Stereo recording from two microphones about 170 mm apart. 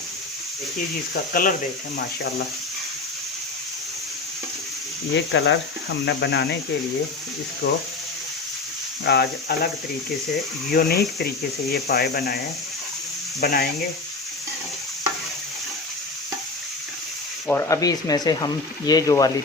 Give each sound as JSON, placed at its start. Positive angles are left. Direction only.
{"t": 1.1, "sound": "speech", "side_deg": 55}
{"t": 5.1, "sound": "speech", "side_deg": 90}
{"t": 7.6, "sound": "speech", "side_deg": 70}
{"t": 9.0, "sound": "speech", "side_deg": 75}
{"t": 10.7, "sound": "speech", "side_deg": 65}
{"t": 13.4, "sound": "speech", "side_deg": 65}
{"t": 17.5, "sound": "speech", "side_deg": 15}